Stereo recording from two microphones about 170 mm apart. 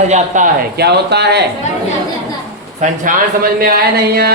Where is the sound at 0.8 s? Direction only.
75° right (ahead or behind).